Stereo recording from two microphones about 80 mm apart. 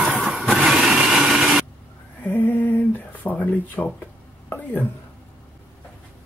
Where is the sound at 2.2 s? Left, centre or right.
Left.